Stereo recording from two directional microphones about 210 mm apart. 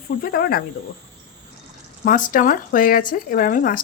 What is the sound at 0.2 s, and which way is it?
Speech, 45° left (ahead or behind).